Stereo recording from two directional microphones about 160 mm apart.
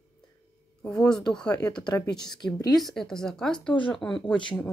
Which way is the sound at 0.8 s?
5° left (ahead or behind).